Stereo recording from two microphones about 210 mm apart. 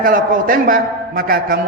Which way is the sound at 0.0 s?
40° right (ahead or behind).